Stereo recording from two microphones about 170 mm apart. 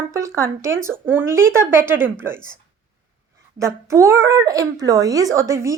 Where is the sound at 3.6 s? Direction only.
15° right (ahead or behind).